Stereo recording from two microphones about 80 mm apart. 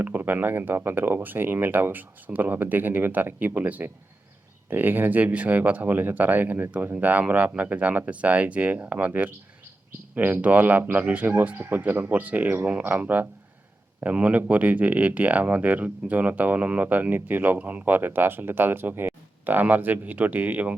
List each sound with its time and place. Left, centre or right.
0.0 s speech: right